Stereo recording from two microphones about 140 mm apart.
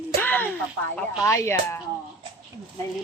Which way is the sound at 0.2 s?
15° left (ahead or behind).